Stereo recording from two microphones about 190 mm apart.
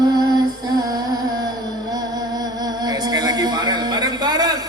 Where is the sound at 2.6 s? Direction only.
20° right (ahead or behind).